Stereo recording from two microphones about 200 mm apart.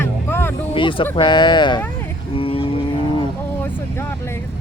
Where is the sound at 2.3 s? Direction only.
25° left (ahead or behind).